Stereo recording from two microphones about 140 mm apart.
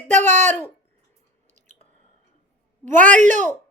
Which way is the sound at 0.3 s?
55° right (ahead or behind).